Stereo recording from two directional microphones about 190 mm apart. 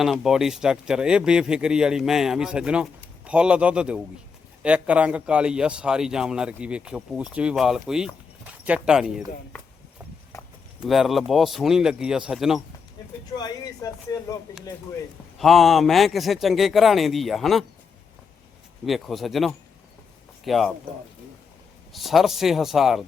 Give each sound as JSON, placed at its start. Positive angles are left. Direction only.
{"t": 0.0, "sound": "a man's voice", "side_deg": 0}
{"t": 10.8, "sound": "a man's voice", "side_deg": 0}
{"t": 13.3, "sound": "speech", "side_deg": 20}
{"t": 15.4, "sound": "a man's voice", "side_deg": 0}
{"t": 18.9, "sound": "a man's voice", "side_deg": 0}
{"t": 21.9, "sound": "a man's voice", "side_deg": 0}